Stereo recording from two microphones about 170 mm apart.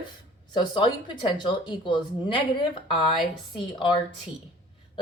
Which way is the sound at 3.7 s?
25° left (ahead or behind).